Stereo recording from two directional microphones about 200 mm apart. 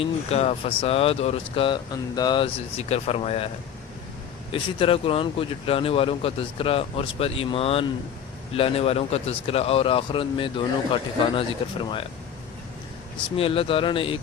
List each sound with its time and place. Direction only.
0.0 s speech: 30° left (ahead or behind)
4.5 s speech: 25° left (ahead or behind)
13.3 s speech: 30° left (ahead or behind)